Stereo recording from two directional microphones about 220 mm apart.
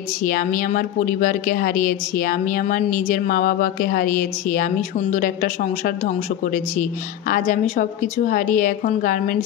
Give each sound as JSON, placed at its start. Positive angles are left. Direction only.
{"t": 0.2, "sound": "a woman's voice", "side_deg": 40}